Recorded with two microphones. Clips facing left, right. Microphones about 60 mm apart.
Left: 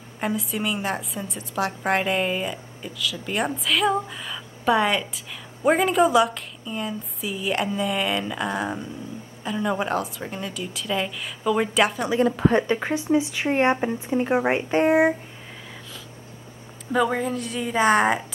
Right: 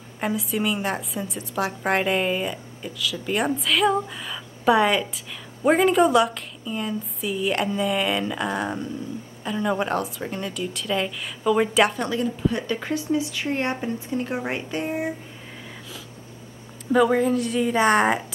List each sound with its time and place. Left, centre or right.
0.2 s a woman's voice: centre
12.6 s speech: left
14.9 s speech: left
16.9 s a woman's voice: centre